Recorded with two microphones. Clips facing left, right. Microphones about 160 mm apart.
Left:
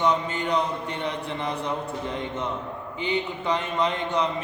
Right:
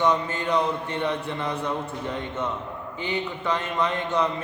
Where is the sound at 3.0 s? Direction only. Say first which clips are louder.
Left 1 dB; 20° left (ahead or behind).